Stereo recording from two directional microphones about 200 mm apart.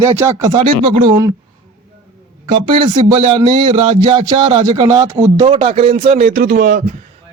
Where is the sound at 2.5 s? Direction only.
25° right (ahead or behind); by 6.7 s 40° right (ahead or behind).